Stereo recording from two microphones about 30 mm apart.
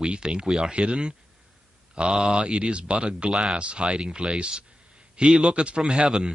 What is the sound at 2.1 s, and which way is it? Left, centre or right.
Speech, right.